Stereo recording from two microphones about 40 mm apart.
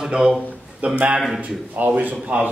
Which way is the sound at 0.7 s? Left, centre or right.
Right.